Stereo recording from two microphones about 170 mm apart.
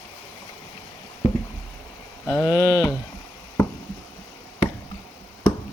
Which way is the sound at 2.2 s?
10° left (ahead or behind).